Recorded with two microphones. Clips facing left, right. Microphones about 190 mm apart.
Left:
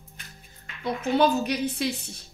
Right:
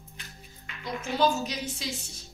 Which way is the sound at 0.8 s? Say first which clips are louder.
Left 4 dB; 60° left (ahead or behind).